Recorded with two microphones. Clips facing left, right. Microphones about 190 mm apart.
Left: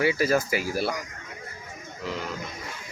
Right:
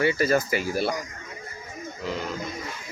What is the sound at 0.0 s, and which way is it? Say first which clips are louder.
Speech: right 1 dB; 5° left (ahead or behind).